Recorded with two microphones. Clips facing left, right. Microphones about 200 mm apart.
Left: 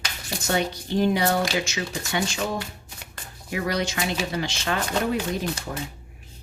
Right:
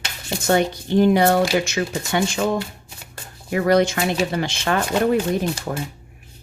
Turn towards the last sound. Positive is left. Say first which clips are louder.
# right 6 dB
turn(degrees=-65)  # may be behind; listen again after turning